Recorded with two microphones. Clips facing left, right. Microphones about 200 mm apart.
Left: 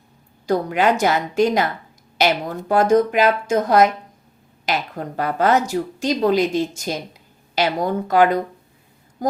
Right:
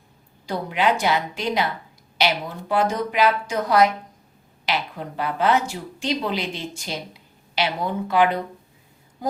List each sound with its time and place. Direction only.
0.4 s speech: 45° left (ahead or behind)
2.6 s speech: 45° left (ahead or behind)